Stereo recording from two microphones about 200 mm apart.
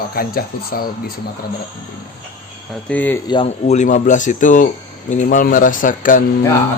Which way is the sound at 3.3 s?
30° left (ahead or behind).